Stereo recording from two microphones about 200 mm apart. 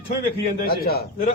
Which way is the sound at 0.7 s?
50° left (ahead or behind).